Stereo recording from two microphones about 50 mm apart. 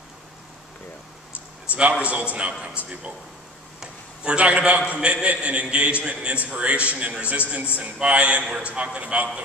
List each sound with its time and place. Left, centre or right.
1.7 s a man's voice: right
3.8 s a sound: centre
5.0 s a man's voice: right